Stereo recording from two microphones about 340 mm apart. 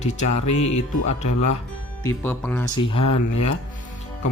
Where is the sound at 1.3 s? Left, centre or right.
Left.